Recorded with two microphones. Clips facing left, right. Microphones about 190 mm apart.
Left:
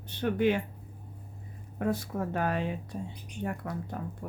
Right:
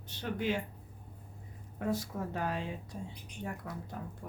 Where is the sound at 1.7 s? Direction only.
60° left (ahead or behind).